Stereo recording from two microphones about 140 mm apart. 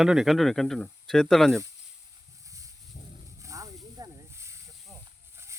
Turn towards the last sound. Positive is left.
turn(degrees=-20)  # may be behind; listen again after turning